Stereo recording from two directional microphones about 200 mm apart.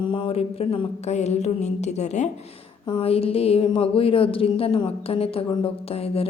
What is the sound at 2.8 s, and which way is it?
A woman's voice, 25° left (ahead or behind).